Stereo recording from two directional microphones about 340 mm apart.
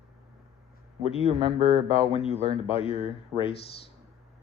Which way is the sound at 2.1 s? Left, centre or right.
Centre.